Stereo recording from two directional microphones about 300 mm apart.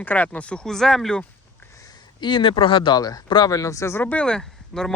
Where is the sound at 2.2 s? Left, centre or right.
Centre.